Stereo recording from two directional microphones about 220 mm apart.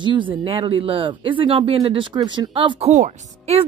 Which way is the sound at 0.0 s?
20° right (ahead or behind).